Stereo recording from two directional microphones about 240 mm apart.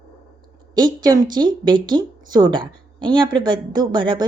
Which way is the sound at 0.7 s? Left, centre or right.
Centre.